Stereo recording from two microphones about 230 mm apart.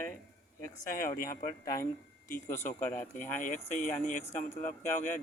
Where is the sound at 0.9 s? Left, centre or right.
Left.